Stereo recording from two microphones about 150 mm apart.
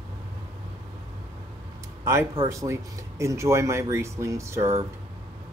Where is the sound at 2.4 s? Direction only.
20° right (ahead or behind).